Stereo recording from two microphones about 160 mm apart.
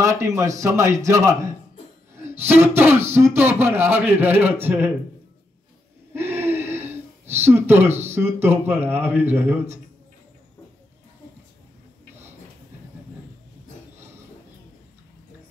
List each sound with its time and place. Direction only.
0.0 s a man's voice: 20° right (ahead or behind)
6.1 s speech: 15° right (ahead or behind)